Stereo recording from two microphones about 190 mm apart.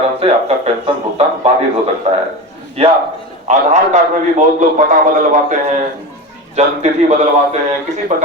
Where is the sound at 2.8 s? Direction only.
30° right (ahead or behind).